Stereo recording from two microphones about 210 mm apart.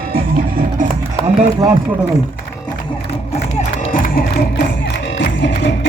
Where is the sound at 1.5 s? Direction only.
15° right (ahead or behind).